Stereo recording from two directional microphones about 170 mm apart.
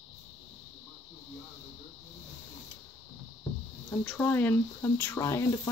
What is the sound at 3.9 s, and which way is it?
Speech, 10° left (ahead or behind).